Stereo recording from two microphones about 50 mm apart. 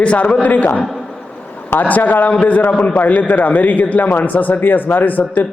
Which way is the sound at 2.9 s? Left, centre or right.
Left.